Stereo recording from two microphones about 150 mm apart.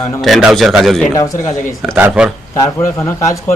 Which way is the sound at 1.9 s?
10° right (ahead or behind).